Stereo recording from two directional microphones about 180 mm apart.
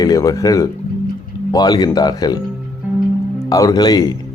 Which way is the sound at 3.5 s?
20° left (ahead or behind).